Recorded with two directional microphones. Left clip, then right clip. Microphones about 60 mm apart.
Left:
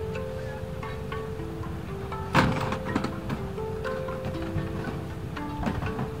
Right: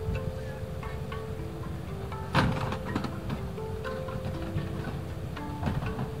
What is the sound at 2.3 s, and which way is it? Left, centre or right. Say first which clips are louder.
Music: left 4 dB; centre.